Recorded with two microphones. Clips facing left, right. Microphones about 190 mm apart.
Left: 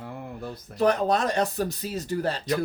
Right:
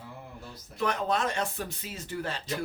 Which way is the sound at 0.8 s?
40° left (ahead or behind).